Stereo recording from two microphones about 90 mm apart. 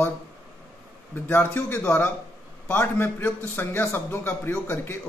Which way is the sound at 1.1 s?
20° left (ahead or behind).